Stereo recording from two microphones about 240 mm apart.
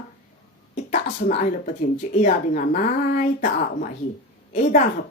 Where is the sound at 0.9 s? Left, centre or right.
Left.